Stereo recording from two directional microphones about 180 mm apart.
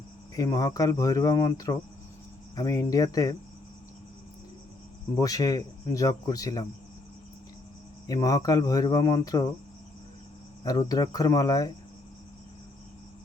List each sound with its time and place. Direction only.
0.3 s speech: 20° left (ahead or behind)
5.2 s speech: 20° left (ahead or behind)
8.0 s speech: 20° left (ahead or behind)
10.6 s speech: 20° left (ahead or behind)